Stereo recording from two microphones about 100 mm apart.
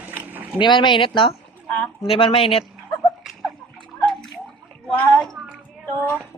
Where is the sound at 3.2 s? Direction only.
Centre (ahead or behind).